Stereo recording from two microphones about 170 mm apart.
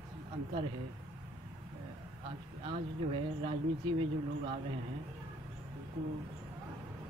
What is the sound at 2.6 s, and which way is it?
Speech, 35° right (ahead or behind).